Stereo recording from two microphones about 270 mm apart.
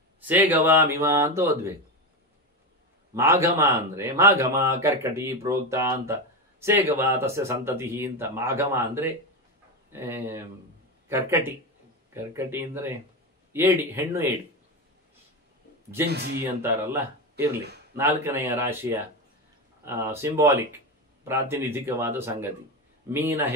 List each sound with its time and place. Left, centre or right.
0.2 s speech: centre
3.2 s speech: centre
16.1 s speech: right
16.4 s speech: centre